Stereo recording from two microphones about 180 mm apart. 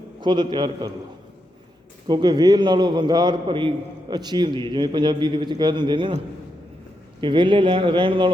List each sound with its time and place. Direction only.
0.2 s a man's voice: 25° right (ahead or behind)
2.0 s a man's voice: 25° right (ahead or behind)
7.2 s a man's voice: 25° right (ahead or behind)